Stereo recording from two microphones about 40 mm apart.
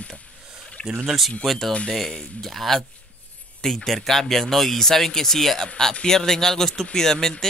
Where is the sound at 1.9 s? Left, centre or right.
Centre.